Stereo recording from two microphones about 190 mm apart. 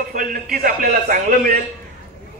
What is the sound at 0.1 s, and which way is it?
A man's voice, 50° right (ahead or behind).